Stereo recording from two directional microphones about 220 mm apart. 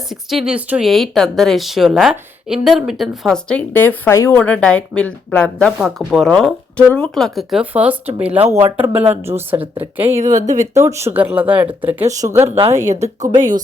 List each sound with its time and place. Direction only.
0.1 s speech: centre (ahead or behind)
10.1 s speech: 30° right (ahead or behind)
10.8 s speech: 15° right (ahead or behind)
12.5 s speech: 30° right (ahead or behind)